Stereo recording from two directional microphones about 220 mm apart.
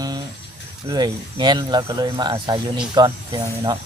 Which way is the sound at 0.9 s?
20° right (ahead or behind).